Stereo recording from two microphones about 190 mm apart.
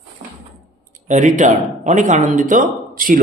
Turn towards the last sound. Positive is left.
turn(degrees=-45)  # may be behind; listen again after turning